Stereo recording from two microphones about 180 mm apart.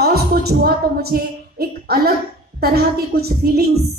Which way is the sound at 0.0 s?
60° right (ahead or behind).